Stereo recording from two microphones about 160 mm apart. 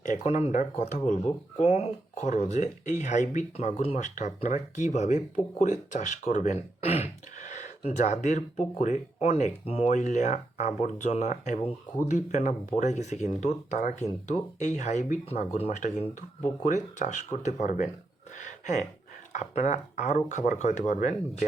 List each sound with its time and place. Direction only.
0.0 s speech: 50° left (ahead or behind)
18.3 s a sound: 50° left (ahead or behind)
19.3 s speech: 50° left (ahead or behind)